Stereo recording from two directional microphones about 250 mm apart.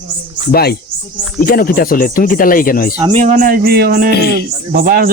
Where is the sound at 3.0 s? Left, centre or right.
Right.